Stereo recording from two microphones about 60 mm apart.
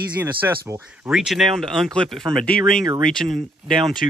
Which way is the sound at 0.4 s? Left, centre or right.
Right.